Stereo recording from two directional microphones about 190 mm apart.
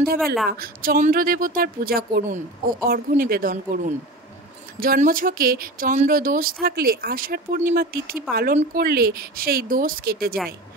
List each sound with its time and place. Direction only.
0.2 s a woman's voice: centre (ahead or behind)
0.5 s speech: 50° right (ahead or behind)